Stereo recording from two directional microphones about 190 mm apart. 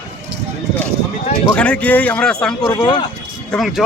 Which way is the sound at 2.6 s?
20° left (ahead or behind).